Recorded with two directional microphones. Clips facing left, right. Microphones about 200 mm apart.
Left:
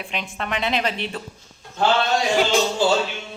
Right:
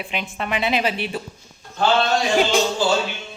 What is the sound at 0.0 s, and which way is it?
A woman's voice, 5° right (ahead or behind).